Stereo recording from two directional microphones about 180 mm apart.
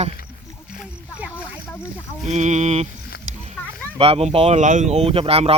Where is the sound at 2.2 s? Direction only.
40° right (ahead or behind).